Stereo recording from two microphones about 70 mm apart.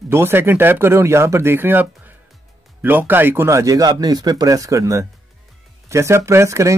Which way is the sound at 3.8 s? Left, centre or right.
Right.